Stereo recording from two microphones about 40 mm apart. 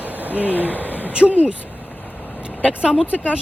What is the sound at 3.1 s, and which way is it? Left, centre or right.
Speech, right.